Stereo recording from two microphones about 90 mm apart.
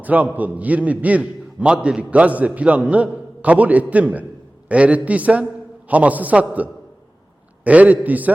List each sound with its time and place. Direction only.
0.0 s a man's voice: 15° right (ahead or behind)